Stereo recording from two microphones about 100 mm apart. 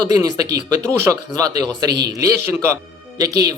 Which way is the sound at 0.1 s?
40° right (ahead or behind).